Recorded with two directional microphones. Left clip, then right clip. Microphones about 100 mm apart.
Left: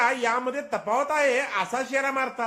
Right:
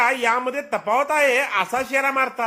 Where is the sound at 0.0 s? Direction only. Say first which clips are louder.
Right 4 dB; 15° right (ahead or behind).